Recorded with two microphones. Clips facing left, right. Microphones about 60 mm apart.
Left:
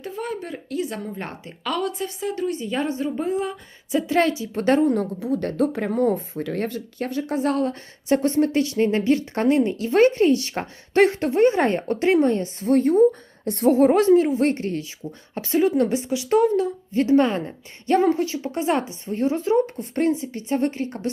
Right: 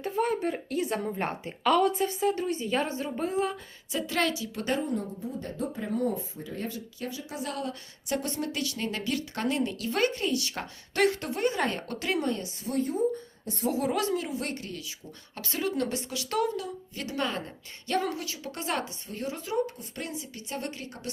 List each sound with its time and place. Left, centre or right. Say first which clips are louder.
0.2 s a woman's voice: right 4 dB; centre
3.9 s a woman's voice: left 8 dB; left
4.6 s speech: left 11 dB; left
7.3 s a woman's voice: left 12 dB; left
13.7 s a woman's voice: left 14 dB; left
15.4 s a woman's voice: left 11 dB; left